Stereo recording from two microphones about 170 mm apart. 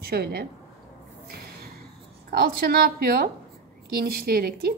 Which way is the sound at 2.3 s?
65° right (ahead or behind).